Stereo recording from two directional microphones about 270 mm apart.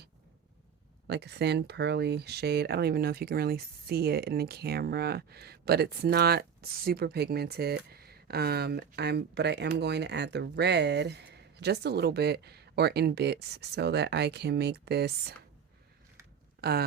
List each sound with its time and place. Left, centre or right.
1.0 s speech: right
16.6 s speech: right